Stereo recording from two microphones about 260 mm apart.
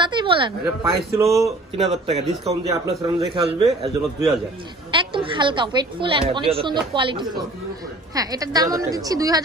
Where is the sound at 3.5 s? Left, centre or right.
Right.